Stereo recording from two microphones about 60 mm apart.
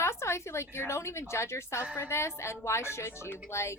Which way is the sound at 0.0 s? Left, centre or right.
Left.